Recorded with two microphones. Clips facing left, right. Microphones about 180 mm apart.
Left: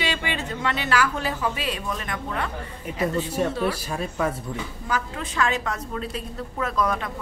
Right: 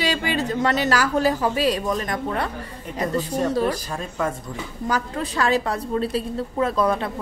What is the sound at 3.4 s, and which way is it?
Speech, 40° right (ahead or behind).